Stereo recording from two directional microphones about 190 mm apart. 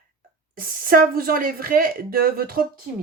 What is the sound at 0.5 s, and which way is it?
Speech, 50° right (ahead or behind).